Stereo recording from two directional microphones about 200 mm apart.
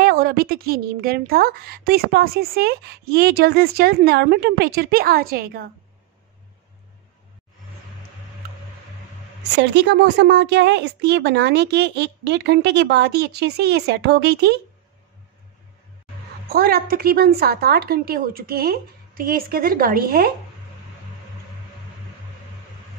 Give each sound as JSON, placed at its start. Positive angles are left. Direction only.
{"t": 0.0, "sound": "a woman's voice", "side_deg": -50}
{"t": 9.6, "sound": "speech", "side_deg": -60}
{"t": 16.4, "sound": "a woman's voice", "side_deg": -50}